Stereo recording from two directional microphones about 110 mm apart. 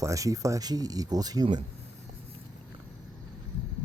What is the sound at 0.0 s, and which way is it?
Speech, 30° right (ahead or behind).